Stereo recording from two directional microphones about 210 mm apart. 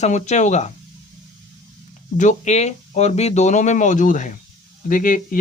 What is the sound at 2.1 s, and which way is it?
Speech, 35° left (ahead or behind).